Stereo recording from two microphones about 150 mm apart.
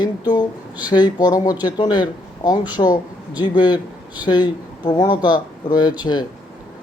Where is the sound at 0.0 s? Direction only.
30° left (ahead or behind).